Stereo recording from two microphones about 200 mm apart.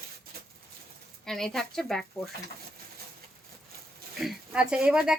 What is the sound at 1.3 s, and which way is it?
Speech, centre (ahead or behind).